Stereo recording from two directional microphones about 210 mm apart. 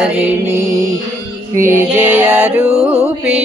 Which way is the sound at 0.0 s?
10° right (ahead or behind).